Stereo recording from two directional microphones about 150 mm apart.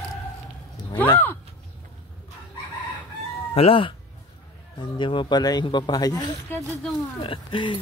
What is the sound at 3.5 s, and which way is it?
Speech, 40° left (ahead or behind).